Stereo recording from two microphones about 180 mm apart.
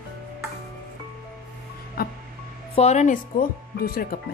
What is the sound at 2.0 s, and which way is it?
Music, 60° left (ahead or behind).